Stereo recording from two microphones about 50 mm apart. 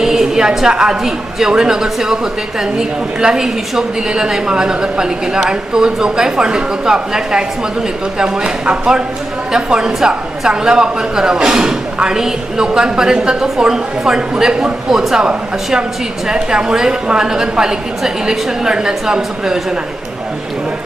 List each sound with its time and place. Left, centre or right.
0.0 s a woman's voice: centre